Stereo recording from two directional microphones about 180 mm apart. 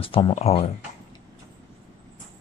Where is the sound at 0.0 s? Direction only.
30° left (ahead or behind).